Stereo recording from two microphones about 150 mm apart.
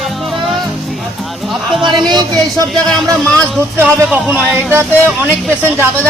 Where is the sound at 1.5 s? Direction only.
Centre (ahead or behind).